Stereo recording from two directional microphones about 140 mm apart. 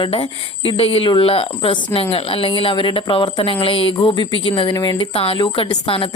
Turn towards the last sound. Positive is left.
turn(degrees=40)  # may be behind; listen again after turning